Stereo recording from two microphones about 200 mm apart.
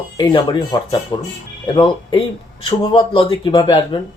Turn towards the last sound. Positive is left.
turn(degrees=25)  # may be behind; listen again after turning